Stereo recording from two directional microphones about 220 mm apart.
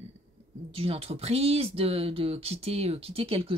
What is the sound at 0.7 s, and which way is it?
A woman's voice, 25° right (ahead or behind).